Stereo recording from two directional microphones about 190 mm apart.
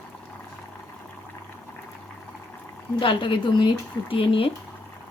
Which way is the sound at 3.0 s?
25° left (ahead or behind).